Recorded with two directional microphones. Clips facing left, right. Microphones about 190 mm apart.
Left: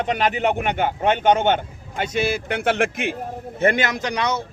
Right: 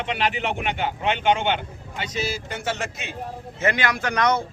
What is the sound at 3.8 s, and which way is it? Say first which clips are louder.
Speech: even; 20° left (ahead or behind).